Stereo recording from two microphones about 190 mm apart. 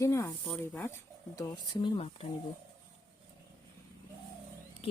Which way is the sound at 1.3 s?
20° left (ahead or behind).